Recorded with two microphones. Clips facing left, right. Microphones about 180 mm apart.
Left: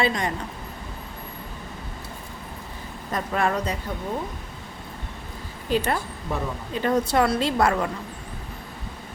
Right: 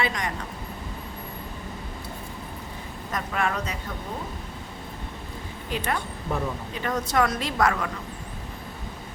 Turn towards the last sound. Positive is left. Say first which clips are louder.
# left 3 dB
turn(degrees=30)  # may be behind; listen again after turning